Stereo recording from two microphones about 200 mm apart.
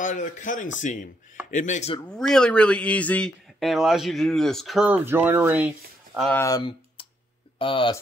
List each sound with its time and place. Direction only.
0.0 s a man's voice: 40° left (ahead or behind)
2.1 s speech: 5° left (ahead or behind)
6.1 s speech: 5° left (ahead or behind)
6.4 s speech: 20° left (ahead or behind)